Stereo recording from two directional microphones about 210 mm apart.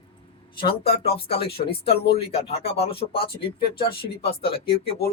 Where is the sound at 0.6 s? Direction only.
25° left (ahead or behind).